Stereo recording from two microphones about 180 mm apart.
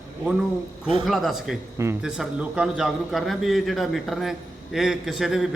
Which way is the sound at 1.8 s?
15° right (ahead or behind).